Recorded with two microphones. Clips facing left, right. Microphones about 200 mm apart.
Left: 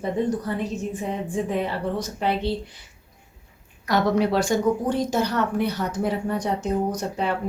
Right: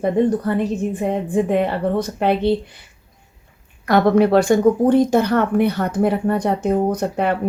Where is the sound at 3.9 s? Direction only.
60° right (ahead or behind).